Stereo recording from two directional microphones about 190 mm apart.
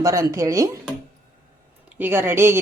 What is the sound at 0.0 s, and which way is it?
Speech, 15° right (ahead or behind).